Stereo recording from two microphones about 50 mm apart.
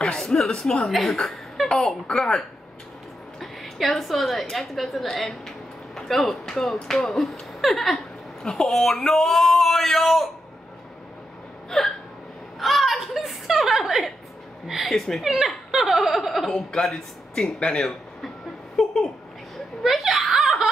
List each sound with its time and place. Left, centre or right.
0.0 s a sound: centre
0.5 s speech: centre
1.2 s chuckle: centre
1.8 s speech: centre
3.3 s a woman's voice: centre
11.7 s speech: centre
12.5 s a sound: centre
14.7 s speech: centre
16.7 s a man's voice: centre
19.8 s chuckle: centre